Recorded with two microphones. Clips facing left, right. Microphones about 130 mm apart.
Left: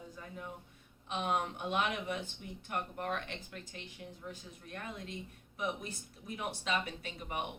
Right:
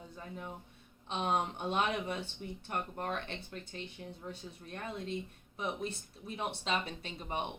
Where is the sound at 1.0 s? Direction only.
30° right (ahead or behind).